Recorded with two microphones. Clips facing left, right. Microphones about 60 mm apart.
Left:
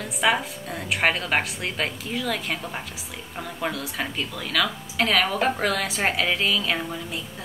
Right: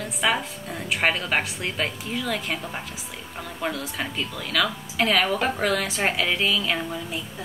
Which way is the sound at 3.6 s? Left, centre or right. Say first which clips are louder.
Even; centre.